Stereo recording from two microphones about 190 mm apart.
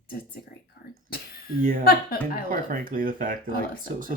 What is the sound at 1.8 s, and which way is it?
Speech, 55° left (ahead or behind).